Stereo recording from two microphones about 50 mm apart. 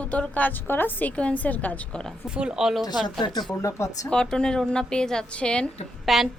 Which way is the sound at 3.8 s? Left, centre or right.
Left.